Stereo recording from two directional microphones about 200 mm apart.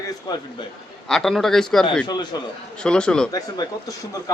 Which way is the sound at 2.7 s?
5° left (ahead or behind).